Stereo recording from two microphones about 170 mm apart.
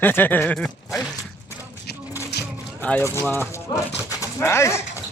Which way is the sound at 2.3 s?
75° left (ahead or behind).